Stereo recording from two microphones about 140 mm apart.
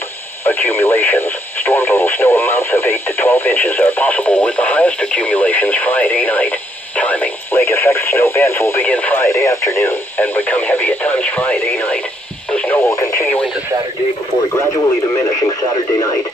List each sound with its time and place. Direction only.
0.5 s speech: 15° left (ahead or behind)
15.4 s speech: 30° left (ahead or behind)